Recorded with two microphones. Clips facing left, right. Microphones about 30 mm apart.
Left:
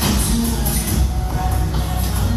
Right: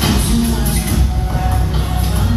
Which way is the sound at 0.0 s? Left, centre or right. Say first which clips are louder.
Right 4 dB; right.